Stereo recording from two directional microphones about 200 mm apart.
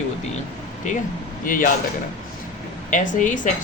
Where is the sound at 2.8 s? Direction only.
40° left (ahead or behind).